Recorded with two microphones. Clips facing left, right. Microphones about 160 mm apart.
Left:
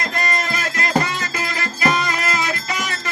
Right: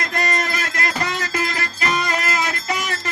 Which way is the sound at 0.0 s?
75° right (ahead or behind).